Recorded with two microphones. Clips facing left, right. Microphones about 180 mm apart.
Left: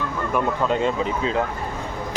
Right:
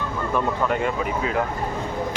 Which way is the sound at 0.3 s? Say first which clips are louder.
Left 1 dB; 20° left (ahead or behind).